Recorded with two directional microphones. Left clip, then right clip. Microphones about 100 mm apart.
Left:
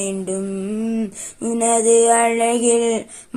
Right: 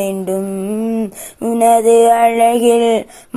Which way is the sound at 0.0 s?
25° right (ahead or behind).